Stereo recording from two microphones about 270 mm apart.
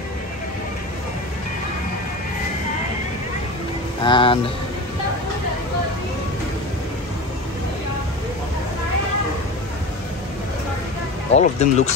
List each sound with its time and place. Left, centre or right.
4.0 s speech: centre
11.3 s speech: left